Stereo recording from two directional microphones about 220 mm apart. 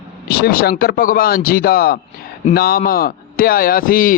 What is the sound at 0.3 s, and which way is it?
A man's voice, 45° left (ahead or behind).